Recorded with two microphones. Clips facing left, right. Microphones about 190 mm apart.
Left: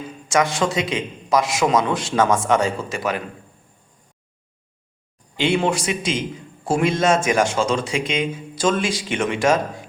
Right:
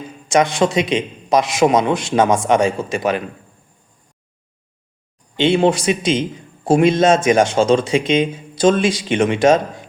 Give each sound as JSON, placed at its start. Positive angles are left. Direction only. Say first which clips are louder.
{"t": 0.3, "sound": "a man's voice", "louder": "right 4 dB", "side_deg": -20}
{"t": 5.4, "sound": "a man's voice", "louder": "right 5 dB", "side_deg": -30}